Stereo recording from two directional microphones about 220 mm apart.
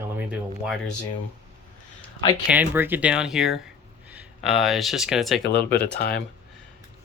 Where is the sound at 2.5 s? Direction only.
10° right (ahead or behind).